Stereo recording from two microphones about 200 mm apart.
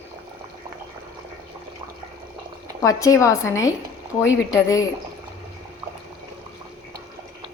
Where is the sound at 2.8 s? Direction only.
15° left (ahead or behind).